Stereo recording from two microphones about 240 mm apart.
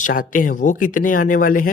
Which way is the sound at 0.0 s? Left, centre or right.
Left.